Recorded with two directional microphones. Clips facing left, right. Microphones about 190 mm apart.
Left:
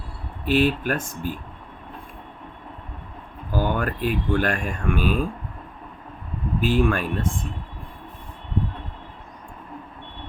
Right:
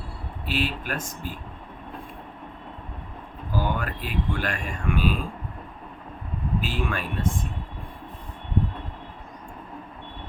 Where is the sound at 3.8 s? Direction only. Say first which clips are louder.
Left 6 dB; 50° left (ahead or behind).